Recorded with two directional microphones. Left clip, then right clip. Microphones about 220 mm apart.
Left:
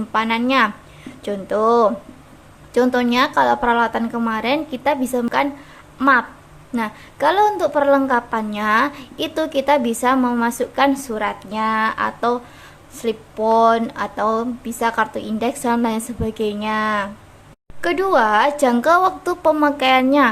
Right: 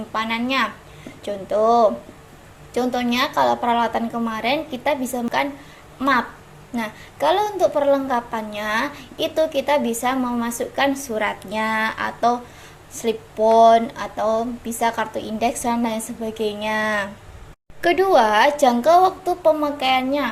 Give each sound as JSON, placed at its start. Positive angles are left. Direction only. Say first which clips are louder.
{"t": 0.1, "sound": "a woman's voice", "louder": "left 5 dB", "side_deg": 20}